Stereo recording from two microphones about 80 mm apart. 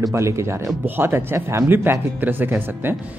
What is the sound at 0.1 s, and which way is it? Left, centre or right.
A man's voice, right.